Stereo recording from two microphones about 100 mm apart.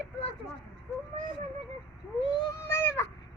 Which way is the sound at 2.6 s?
25° left (ahead or behind).